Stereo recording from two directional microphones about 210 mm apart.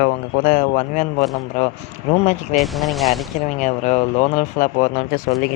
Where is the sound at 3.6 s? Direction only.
35° left (ahead or behind).